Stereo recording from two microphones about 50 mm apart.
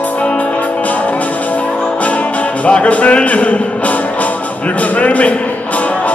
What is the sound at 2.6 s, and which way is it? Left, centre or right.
Music, left.